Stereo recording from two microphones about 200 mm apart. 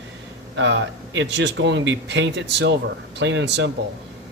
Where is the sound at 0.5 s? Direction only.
65° right (ahead or behind).